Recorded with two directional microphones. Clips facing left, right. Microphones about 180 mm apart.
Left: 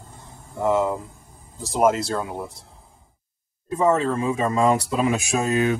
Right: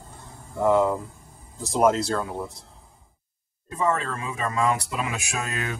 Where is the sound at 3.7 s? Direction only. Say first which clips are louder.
Left 6 dB; 20° left (ahead or behind).